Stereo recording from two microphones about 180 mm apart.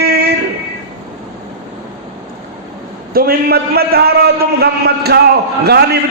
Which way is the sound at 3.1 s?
60° right (ahead or behind).